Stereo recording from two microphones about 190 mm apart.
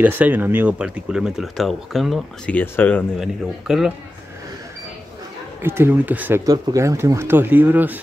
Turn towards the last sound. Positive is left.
turn(degrees=-10)  # may be behind; listen again after turning